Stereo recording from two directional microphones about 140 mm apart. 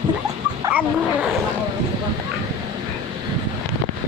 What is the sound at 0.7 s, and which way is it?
Dog, 10° right (ahead or behind).